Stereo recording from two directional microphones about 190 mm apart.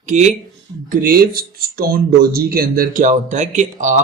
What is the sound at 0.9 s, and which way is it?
Speech, 50° right (ahead or behind).